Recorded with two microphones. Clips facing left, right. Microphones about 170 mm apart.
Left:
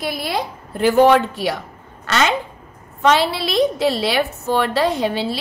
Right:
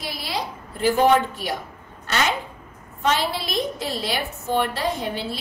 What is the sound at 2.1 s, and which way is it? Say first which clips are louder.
Speech: left 5 dB; 85° left.